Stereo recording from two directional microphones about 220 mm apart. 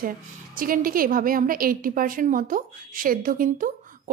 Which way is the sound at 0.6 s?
40° right (ahead or behind).